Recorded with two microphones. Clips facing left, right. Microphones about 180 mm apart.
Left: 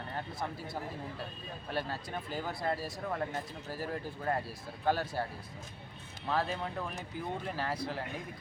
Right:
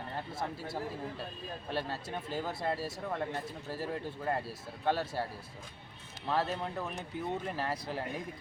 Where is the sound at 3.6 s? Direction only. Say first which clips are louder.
Right 2 dB; 30° right (ahead or behind).